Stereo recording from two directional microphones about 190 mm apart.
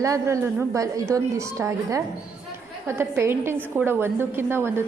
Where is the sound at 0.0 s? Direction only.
15° right (ahead or behind).